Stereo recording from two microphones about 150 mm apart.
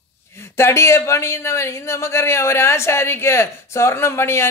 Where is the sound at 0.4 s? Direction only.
15° left (ahead or behind).